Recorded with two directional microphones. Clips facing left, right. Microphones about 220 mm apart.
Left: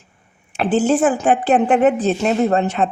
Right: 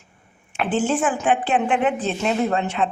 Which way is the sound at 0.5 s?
40° left (ahead or behind).